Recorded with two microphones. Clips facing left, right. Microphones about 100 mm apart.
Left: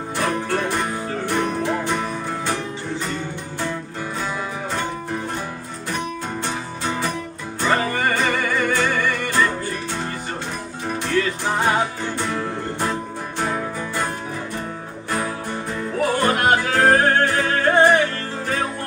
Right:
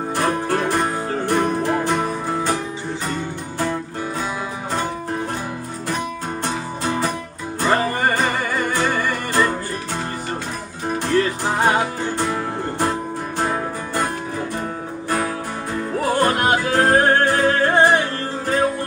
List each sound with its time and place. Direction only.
0.1 s music: 40° right (ahead or behind)
6.4 s music: 40° right (ahead or behind)
11.1 s music: 35° right (ahead or behind)
16.0 s music: 40° right (ahead or behind)